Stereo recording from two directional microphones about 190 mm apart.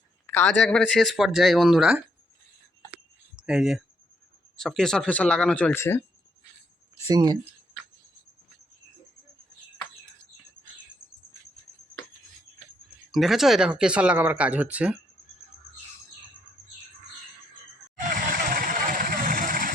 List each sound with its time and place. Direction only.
0.3 s a man's voice: 10° left (ahead or behind)
3.3 s speech: 5° right (ahead or behind); by 6.0 s 15° left (ahead or behind)
7.1 s speech: 20° right (ahead or behind)
13.1 s speech: centre (ahead or behind)
18.5 s vehicle: 50° right (ahead or behind)